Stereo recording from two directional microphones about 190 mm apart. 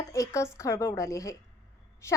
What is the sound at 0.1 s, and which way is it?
A woman's voice, 15° left (ahead or behind).